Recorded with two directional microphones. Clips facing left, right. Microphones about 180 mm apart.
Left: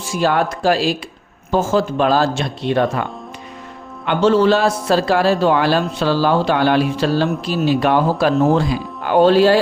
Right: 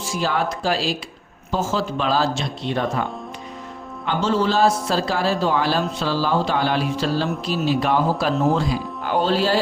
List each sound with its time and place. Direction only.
0.0 s a man's voice: 55° left (ahead or behind)